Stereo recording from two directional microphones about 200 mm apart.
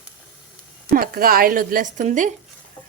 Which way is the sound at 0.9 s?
45° right (ahead or behind).